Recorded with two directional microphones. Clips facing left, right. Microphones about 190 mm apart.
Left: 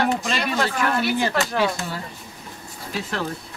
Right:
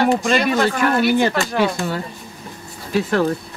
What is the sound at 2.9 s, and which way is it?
Speech, 60° right (ahead or behind).